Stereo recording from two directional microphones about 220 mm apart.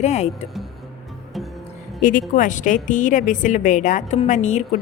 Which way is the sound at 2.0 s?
35° left (ahead or behind).